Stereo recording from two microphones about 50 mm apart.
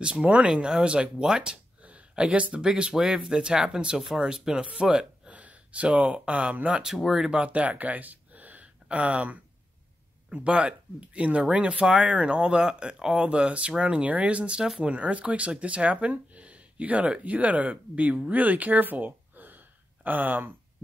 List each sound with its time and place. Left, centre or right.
0.0 s speech: right
1.8 s a sound: right
2.2 s speech: right
7.0 s speech: centre
7.3 s speech: right